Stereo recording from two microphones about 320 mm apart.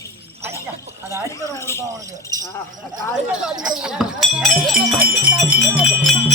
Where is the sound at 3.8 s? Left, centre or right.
Centre.